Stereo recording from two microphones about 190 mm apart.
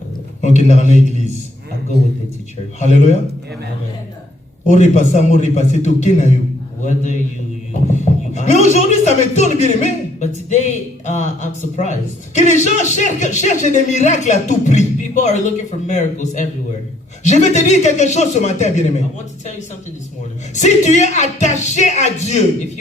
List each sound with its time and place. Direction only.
0.4 s speech: 35° left (ahead or behind)
2.9 s speech: 35° left (ahead or behind)
4.6 s speech: 40° left (ahead or behind)
20.5 s speech: 40° left (ahead or behind)